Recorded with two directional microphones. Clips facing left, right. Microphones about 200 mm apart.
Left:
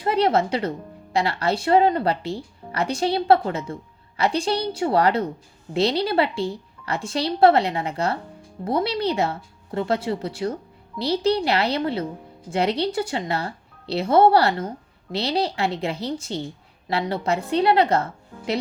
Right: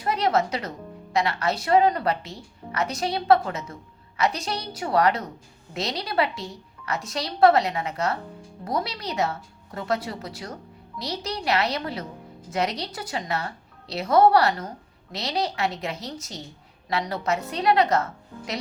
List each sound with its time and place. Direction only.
0.0 s speech: 30° left (ahead or behind)